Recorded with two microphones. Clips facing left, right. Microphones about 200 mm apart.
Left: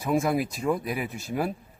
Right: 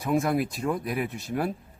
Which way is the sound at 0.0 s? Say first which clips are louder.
Even; centre (ahead or behind).